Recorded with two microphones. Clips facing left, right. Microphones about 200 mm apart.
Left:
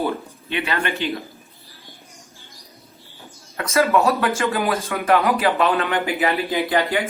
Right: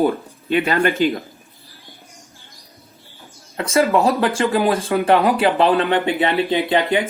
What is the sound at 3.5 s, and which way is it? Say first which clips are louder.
Speech: right 2 dB; 30° right (ahead or behind).